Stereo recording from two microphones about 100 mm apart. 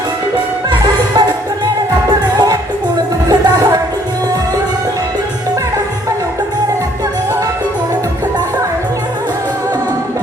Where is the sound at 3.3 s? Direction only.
40° right (ahead or behind).